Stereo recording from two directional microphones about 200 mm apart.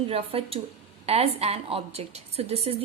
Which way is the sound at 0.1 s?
25° right (ahead or behind).